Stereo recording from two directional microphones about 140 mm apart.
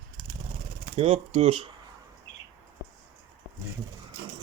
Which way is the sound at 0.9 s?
50° right (ahead or behind).